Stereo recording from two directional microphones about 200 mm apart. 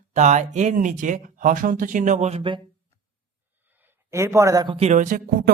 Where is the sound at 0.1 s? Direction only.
35° right (ahead or behind).